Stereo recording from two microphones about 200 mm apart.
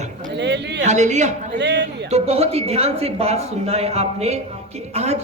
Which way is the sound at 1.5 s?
60° right (ahead or behind).